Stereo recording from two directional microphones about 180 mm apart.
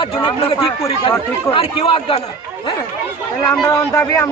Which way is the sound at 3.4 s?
15° left (ahead or behind).